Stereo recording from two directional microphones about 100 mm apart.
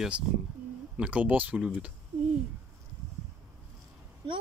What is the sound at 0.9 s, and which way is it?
Speech, 10° right (ahead or behind).